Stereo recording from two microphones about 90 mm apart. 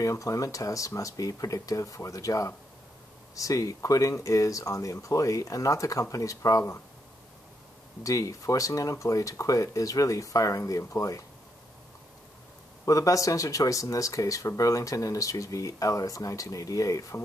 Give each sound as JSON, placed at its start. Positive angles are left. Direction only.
{"t": 0.0, "sound": "speech", "side_deg": 40}
{"t": 8.0, "sound": "speech", "side_deg": 40}
{"t": 12.8, "sound": "speech", "side_deg": 40}